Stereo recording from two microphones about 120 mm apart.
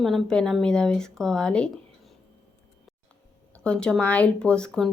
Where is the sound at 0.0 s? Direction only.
Centre (ahead or behind).